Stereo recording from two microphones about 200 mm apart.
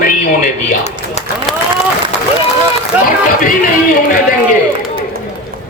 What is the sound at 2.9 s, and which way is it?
Run, 5° right (ahead or behind).